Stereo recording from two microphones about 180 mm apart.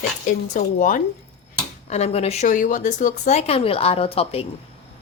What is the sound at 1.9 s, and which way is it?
A woman's voice, 35° left (ahead or behind).